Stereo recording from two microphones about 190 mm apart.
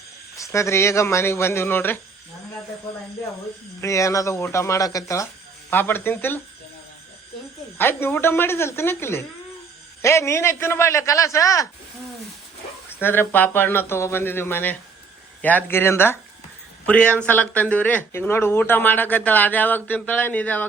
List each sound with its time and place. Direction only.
0.3 s speech: 15° left (ahead or behind)
3.8 s speech: 15° left (ahead or behind)
7.8 s speech: 10° left (ahead or behind)
13.0 s speech: 10° left (ahead or behind)